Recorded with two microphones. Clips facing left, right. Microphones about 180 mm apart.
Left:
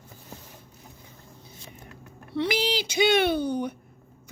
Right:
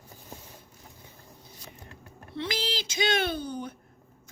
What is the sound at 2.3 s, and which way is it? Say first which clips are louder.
Speech: left 7 dB; 60° left (ahead or behind).